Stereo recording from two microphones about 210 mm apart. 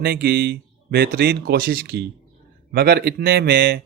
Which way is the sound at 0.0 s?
50° right (ahead or behind).